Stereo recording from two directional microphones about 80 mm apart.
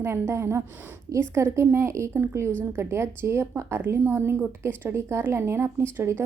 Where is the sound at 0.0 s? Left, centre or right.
Right.